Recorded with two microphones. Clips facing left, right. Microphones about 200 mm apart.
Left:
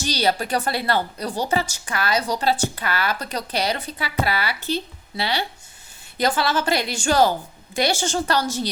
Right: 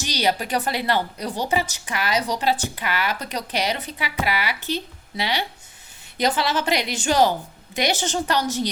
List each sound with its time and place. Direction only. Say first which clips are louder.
0.0 s a woman's voice: left 1 dB; 15° right (ahead or behind)